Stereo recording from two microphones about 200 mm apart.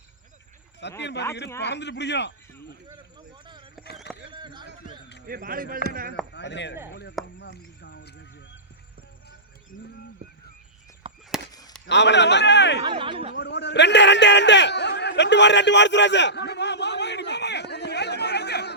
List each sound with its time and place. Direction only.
0.8 s a man's voice: 60° left (ahead or behind)
2.8 s vehicle: 20° right (ahead or behind)
4.3 s speech: 20° right (ahead or behind)
5.2 s speech: 45° right (ahead or behind)
6.3 s speech: 60° left (ahead or behind)
11.1 s chop: 25° right (ahead or behind)
11.9 s a man's voice: 60° left (ahead or behind)
12.9 s speech: 25° right (ahead or behind)
13.3 s a sound: 60° left (ahead or behind)